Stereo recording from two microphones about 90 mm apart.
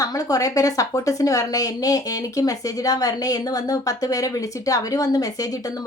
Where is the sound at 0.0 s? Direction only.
40° left (ahead or behind).